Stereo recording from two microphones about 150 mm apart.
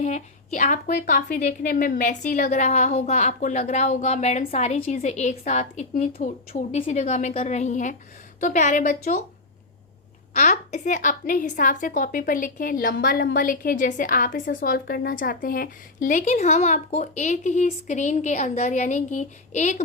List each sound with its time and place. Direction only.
0.0 s a woman's voice: 55° left (ahead or behind)
10.3 s a woman's voice: 55° left (ahead or behind)